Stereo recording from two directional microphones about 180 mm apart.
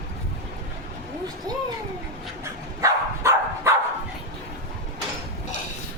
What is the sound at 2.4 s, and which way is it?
Dog, 15° right (ahead or behind).